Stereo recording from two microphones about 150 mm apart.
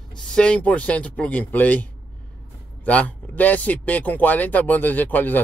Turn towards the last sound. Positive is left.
turn(degrees=10)  # may be behind; listen again after turning